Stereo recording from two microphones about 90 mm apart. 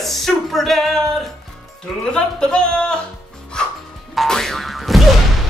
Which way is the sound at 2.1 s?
10° left (ahead or behind).